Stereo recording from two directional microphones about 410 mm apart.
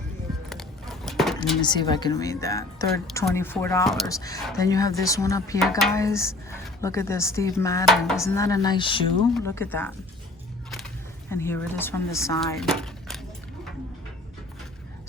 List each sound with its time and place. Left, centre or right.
0.5 s a sound: centre
1.6 s speech: centre
11.3 s speech: centre